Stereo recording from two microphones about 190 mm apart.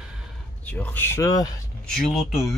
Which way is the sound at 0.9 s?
15° left (ahead or behind).